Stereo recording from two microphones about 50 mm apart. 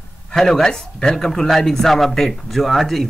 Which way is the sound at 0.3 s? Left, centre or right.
Centre.